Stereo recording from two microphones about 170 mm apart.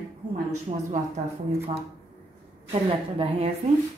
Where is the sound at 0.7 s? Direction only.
35° right (ahead or behind).